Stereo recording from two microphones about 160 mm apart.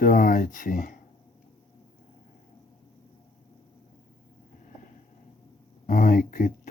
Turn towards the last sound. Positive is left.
turn(degrees=65)  # may be behind; listen again after turning